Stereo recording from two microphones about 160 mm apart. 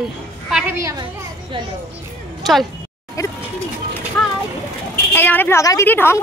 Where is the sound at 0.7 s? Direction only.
20° right (ahead or behind).